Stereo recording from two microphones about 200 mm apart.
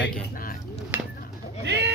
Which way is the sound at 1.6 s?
55° right (ahead or behind).